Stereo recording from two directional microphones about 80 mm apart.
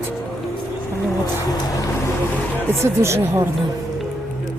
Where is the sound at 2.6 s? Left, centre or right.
Right.